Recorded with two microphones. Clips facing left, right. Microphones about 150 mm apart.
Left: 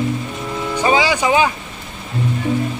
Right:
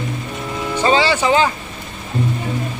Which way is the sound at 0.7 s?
10° left (ahead or behind).